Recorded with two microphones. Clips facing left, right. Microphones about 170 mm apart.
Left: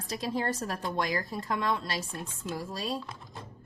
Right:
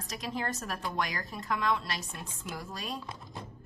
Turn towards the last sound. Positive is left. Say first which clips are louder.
# left 5 dB
turn(degrees=30)  # may be behind; listen again after turning